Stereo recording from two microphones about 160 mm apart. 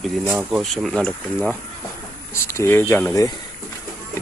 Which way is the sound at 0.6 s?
Centre (ahead or behind).